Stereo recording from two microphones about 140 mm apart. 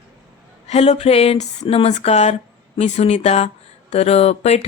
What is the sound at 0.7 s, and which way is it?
Speech, 50° left (ahead or behind).